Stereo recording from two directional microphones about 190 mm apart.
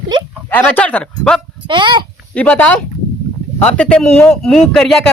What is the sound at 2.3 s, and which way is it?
Speech, 5° left (ahead or behind).